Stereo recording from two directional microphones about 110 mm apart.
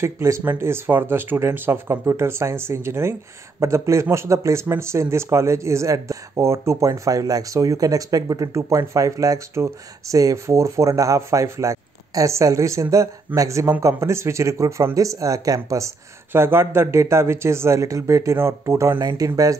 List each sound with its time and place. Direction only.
0.0 s speech: 30° right (ahead or behind)
16.3 s speech: 20° right (ahead or behind)